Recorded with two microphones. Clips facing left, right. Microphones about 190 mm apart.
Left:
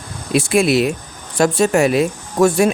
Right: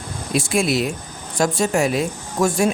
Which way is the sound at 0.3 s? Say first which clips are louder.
Left 5 dB; 65° left (ahead or behind).